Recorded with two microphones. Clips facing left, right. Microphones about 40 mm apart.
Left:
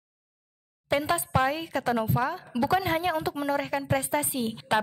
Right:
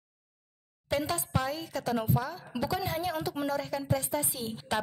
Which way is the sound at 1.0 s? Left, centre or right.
Left.